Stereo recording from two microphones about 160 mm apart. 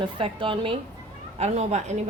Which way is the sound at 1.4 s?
45° right (ahead or behind).